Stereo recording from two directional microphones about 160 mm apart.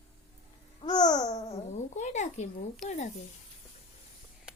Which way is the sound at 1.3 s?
40° left (ahead or behind).